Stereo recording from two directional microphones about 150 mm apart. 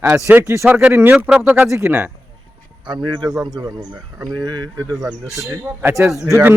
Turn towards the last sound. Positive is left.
turn(degrees=-15)  # may be behind; listen again after turning